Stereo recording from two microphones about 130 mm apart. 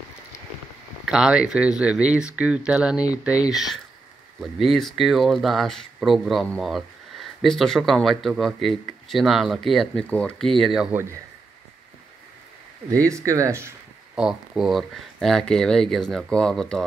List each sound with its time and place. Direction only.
1.0 s speech: 5° right (ahead or behind)
12.9 s speech: 25° right (ahead or behind)
14.1 s speech: 5° right (ahead or behind)